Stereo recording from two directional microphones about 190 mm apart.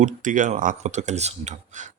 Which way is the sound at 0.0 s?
45° right (ahead or behind).